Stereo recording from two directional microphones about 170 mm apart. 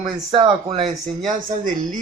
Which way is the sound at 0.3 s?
30° right (ahead or behind).